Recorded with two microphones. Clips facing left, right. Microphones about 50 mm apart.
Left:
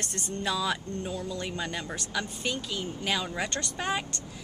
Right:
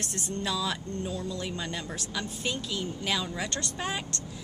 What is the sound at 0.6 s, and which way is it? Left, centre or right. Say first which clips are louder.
A woman's voice: left 1 dB; centre.